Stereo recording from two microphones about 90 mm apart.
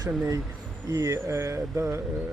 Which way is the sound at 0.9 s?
35° right (ahead or behind).